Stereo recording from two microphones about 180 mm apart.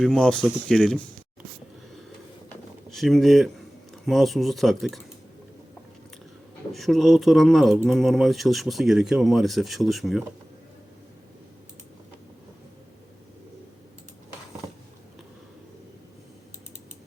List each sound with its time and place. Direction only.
0.0 s speech: 5° left (ahead or behind)
2.9 s speech: centre (ahead or behind)
6.7 s speech: centre (ahead or behind)